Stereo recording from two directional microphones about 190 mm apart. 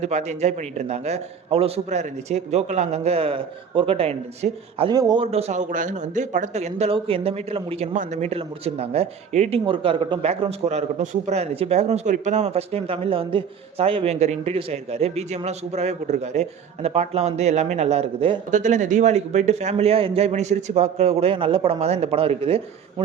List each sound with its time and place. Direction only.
0.0 s speech: 35° right (ahead or behind)